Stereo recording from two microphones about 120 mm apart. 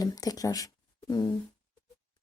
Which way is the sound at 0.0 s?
30° left (ahead or behind).